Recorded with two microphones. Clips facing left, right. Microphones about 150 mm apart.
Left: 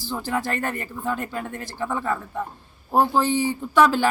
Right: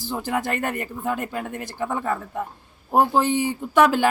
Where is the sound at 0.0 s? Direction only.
20° right (ahead or behind).